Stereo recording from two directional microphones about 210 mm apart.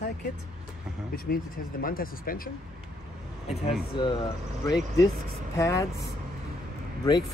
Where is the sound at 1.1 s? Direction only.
45° left (ahead or behind).